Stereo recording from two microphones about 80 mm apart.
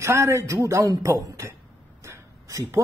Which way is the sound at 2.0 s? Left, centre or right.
Right.